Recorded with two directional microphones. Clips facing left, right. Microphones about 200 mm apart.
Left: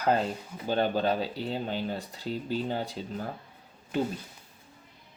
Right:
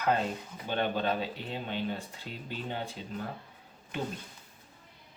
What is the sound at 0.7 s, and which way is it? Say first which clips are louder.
Speech: left 4 dB; 35° left (ahead or behind).